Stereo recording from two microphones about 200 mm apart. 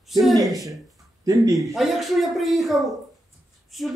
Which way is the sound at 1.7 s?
Centre (ahead or behind).